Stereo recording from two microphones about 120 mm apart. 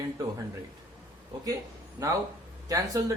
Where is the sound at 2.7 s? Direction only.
30° right (ahead or behind).